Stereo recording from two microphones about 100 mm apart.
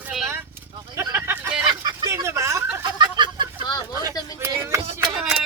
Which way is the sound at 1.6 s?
50° right (ahead or behind).